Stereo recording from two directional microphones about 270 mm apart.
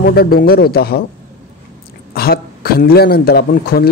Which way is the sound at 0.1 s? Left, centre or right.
Left.